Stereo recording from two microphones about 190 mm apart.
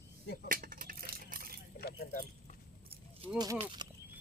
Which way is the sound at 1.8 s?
55° left (ahead or behind).